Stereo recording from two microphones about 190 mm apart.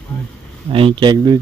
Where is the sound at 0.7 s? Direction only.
25° right (ahead or behind).